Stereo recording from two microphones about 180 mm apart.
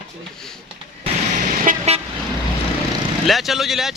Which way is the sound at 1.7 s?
50° right (ahead or behind).